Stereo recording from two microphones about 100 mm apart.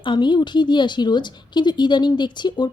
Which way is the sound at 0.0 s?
50° left (ahead or behind).